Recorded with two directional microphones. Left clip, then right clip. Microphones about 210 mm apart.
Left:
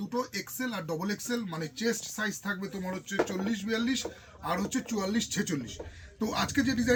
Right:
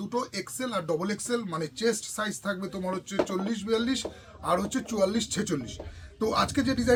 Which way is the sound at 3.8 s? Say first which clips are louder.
Right 2 dB; 20° right (ahead or behind).